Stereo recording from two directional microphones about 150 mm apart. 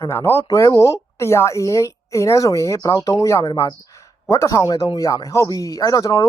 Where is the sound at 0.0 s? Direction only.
15° left (ahead or behind).